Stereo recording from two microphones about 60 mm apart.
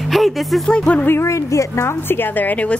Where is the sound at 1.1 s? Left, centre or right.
Left.